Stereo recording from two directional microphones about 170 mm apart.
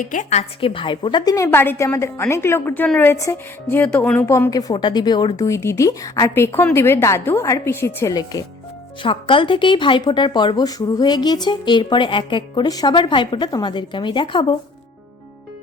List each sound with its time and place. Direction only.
0.0 s a woman's voice: 50° left (ahead or behind); by 14.5 s 30° left (ahead or behind)